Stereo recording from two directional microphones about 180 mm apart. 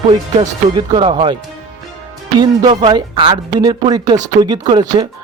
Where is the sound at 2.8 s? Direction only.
25° right (ahead or behind).